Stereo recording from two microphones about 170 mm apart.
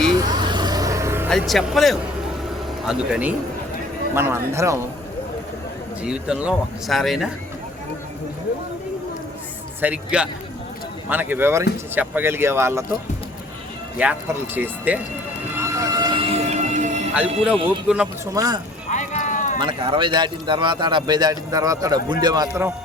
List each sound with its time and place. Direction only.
0.2 s vehicle: 25° right (ahead or behind)
1.3 s speech: centre (ahead or behind); by 4.8 s 15° right (ahead or behind)
6.0 s speech: 5° right (ahead or behind)
9.8 s speech: 5° right (ahead or behind)
14.0 s speech: 10° right (ahead or behind)
15.5 s music: 15° right (ahead or behind); by 17.1 s 45° right (ahead or behind)
17.8 s speech: 5° right (ahead or behind)
18.3 s a man's voice: 20° right (ahead or behind)
18.9 s a sound: 45° left (ahead or behind)
19.5 s a man's voice: 30° right (ahead or behind)